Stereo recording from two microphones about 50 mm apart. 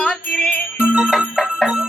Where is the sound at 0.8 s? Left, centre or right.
Centre.